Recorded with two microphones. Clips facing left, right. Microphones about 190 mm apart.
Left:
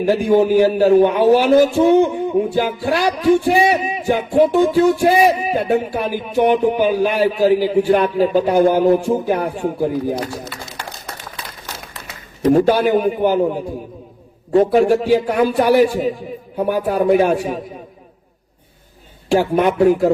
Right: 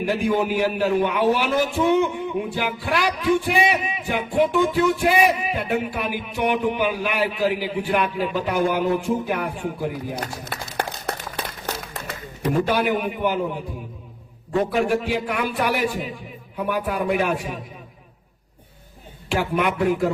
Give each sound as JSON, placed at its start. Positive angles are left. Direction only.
{"t": 0.0, "sound": "speech", "side_deg": 40}
{"t": 10.2, "sound": "a sound", "side_deg": -55}
{"t": 12.5, "sound": "speech", "side_deg": 40}
{"t": 19.3, "sound": "speech", "side_deg": 35}